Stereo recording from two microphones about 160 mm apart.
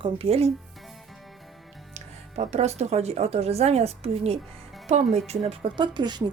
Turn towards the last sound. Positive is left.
turn(degrees=-25)  # may be behind; listen again after turning